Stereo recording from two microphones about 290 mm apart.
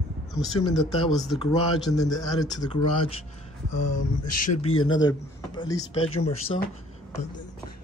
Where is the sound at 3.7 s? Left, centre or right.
Left.